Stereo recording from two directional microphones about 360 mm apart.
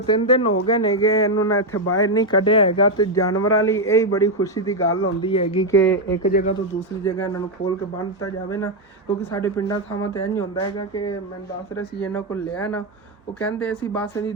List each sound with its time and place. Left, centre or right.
0.0 s speech: centre
1.7 s speech: left
2.0 s speech: centre
3.3 s speech: left
3.7 s speech: centre
4.8 s speech: left
5.2 s speech: centre
8.4 s speech: centre